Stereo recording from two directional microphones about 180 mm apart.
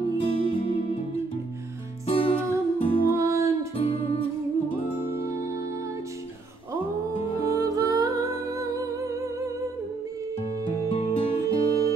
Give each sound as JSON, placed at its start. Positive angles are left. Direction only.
{"t": 0.2, "sound": "music", "side_deg": 30}
{"t": 2.0, "sound": "music", "side_deg": 30}
{"t": 3.1, "sound": "music", "side_deg": -15}
{"t": 3.7, "sound": "music", "side_deg": 30}
{"t": 7.6, "sound": "music", "side_deg": -20}
{"t": 10.4, "sound": "music", "side_deg": 35}